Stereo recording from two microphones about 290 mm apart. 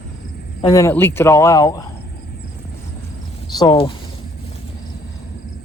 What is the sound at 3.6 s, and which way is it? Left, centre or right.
Speech, centre.